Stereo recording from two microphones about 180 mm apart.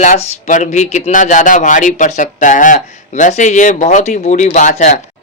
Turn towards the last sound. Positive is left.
turn(degrees=40)  # may be behind; listen again after turning